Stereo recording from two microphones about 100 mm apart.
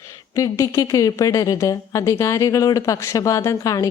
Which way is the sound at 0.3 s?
35° left (ahead or behind).